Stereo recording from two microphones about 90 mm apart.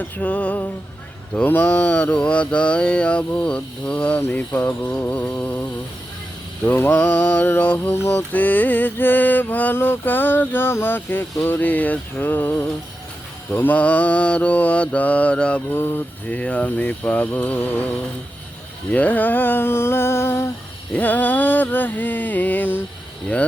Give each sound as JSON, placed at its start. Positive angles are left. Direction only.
{"t": 0.0, "sound": "mantra", "side_deg": 15}
{"t": 6.7, "sound": "mantra", "side_deg": 25}
{"t": 15.7, "sound": "mantra", "side_deg": 25}
{"t": 16.4, "sound": "mantra", "side_deg": 15}